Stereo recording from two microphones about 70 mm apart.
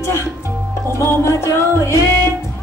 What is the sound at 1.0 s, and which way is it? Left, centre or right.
Speech, left.